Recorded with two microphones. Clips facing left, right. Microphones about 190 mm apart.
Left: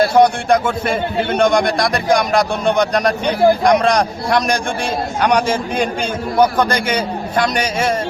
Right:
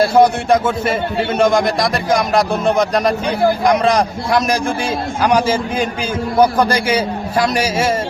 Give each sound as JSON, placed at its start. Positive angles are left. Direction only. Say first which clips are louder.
{"t": 0.2, "sound": "a man's voice", "louder": "right 1 dB", "side_deg": -5}